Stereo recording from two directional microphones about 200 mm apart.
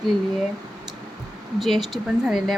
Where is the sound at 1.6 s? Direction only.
Centre (ahead or behind).